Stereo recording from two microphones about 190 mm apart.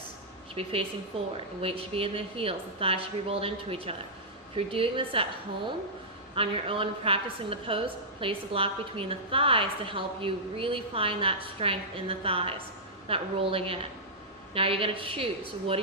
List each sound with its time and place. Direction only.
0.5 s a woman's voice: 30° right (ahead or behind)
6.3 s a woman's voice: 30° right (ahead or behind)